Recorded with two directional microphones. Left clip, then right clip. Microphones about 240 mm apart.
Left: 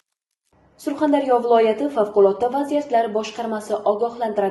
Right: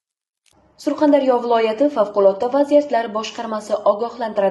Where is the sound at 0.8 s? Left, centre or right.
Right.